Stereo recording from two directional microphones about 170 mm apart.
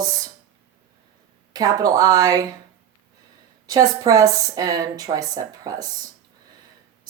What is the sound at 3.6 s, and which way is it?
Speech, 20° right (ahead or behind).